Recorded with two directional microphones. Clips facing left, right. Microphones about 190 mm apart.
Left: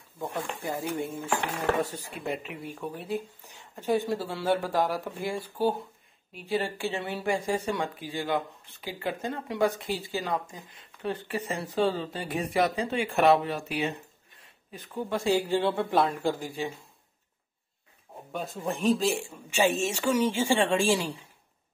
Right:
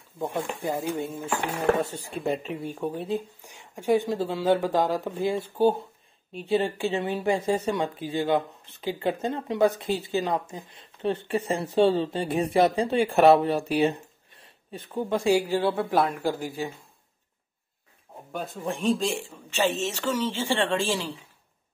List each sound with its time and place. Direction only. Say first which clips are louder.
0.7 s speech: right 2 dB; 20° right (ahead or behind)
3.4 s speech: right 5 dB; 15° right (ahead or behind)
18.3 s speech: right 1 dB; centre (ahead or behind)